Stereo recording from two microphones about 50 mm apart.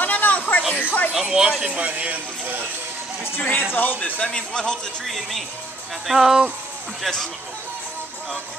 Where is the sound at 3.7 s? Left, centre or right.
Left.